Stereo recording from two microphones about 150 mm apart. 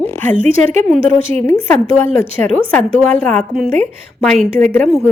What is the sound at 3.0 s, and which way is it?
A woman's voice, 5° left (ahead or behind).